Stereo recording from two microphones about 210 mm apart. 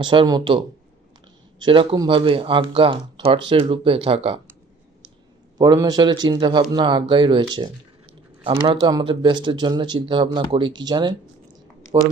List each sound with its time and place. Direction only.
0.0 s a man's voice: 25° right (ahead or behind)
1.6 s a man's voice: 25° right (ahead or behind)
5.5 s a man's voice: 15° right (ahead or behind)